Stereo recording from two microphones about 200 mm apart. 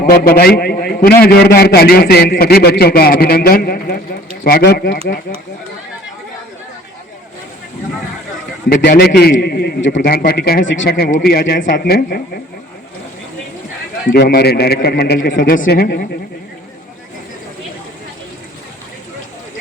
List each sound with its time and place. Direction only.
0.0 s a man's voice: 50° left (ahead or behind)
8.7 s a man's voice: 55° left (ahead or behind)
14.1 s a man's voice: 50° left (ahead or behind)